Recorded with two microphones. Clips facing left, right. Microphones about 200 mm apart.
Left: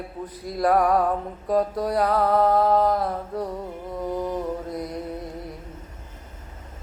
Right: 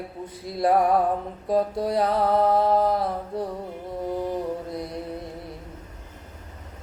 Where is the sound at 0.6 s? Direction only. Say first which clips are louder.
Even; 25° right (ahead or behind).